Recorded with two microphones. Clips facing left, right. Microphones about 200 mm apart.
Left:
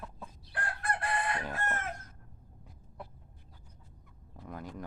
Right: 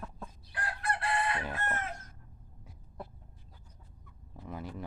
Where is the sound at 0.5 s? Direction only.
50° left (ahead or behind).